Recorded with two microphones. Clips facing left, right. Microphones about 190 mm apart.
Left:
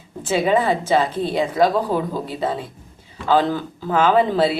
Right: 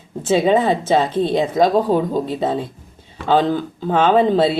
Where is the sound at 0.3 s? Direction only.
25° right (ahead or behind).